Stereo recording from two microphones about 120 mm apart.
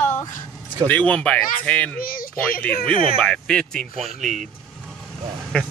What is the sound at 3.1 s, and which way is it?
Speech, 10° left (ahead or behind).